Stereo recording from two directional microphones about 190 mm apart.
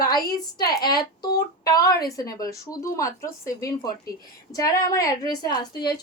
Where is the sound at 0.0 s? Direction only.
20° left (ahead or behind).